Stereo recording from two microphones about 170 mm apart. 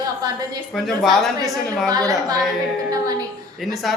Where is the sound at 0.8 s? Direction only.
Centre (ahead or behind).